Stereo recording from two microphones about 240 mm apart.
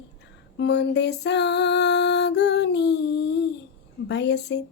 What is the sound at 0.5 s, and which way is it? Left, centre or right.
Music, left.